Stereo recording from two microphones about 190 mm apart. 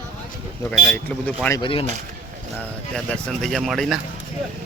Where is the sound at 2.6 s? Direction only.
5° left (ahead or behind).